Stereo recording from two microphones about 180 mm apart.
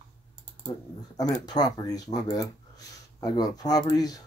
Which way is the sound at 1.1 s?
20° left (ahead or behind).